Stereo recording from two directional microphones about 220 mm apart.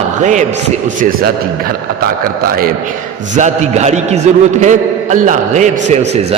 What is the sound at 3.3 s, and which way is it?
A man's voice, 30° right (ahead or behind).